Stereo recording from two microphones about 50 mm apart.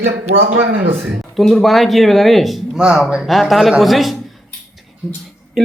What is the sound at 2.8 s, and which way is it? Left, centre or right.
Speech, centre.